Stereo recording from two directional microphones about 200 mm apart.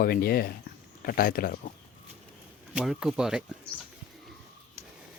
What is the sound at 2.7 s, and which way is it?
Speech, 5° right (ahead or behind).